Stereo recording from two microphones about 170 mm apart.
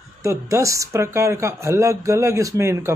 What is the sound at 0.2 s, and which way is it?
Speech, 15° right (ahead or behind).